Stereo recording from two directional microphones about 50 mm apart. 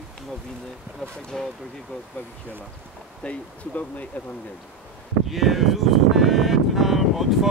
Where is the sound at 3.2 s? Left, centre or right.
Left.